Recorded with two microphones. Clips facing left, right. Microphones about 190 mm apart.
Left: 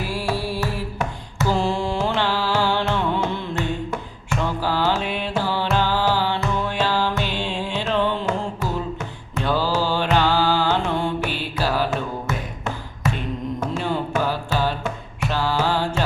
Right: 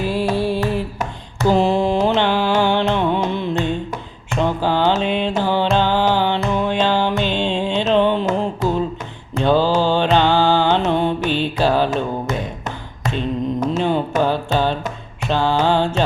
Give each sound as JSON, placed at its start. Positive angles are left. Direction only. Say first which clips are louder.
{"t": 0.0, "sound": "music", "louder": "right 6 dB", "side_deg": -20}
{"t": 9.4, "sound": "music", "louder": "right 6 dB", "side_deg": -25}
{"t": 13.1, "sound": "music", "louder": "right 6 dB", "side_deg": -20}